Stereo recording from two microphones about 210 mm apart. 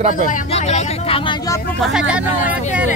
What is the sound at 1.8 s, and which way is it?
Speech, 5° right (ahead or behind).